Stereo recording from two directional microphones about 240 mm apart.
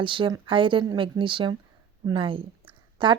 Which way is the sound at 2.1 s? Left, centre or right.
Right.